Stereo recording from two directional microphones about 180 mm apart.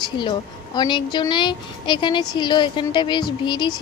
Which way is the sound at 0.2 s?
25° left (ahead or behind).